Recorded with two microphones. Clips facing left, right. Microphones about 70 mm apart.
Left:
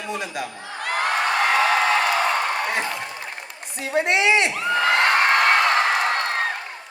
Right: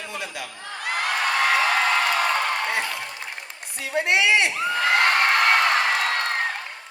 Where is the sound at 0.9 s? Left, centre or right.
Left.